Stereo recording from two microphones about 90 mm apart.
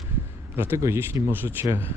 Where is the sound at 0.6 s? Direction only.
30° right (ahead or behind).